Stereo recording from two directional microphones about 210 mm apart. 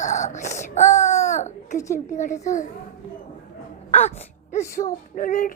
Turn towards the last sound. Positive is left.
turn(degrees=40)  # may be behind; listen again after turning